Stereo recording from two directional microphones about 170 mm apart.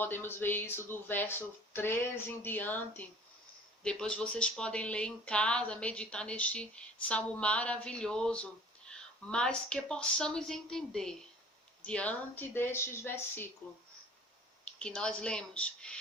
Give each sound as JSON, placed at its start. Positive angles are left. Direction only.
{"t": 0.0, "sound": "speech", "side_deg": 10}
{"t": 14.6, "sound": "speech", "side_deg": 5}